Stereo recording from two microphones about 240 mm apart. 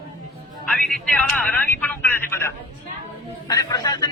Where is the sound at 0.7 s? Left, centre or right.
Centre.